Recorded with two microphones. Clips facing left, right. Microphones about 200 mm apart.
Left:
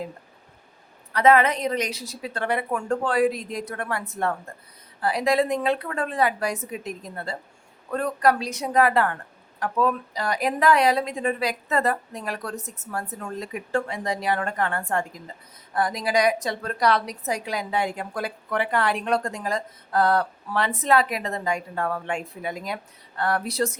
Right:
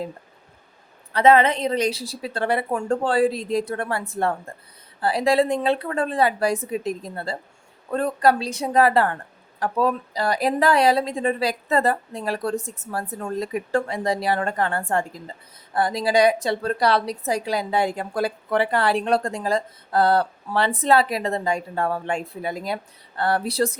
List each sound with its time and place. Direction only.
1.1 s a woman's voice: 25° right (ahead or behind)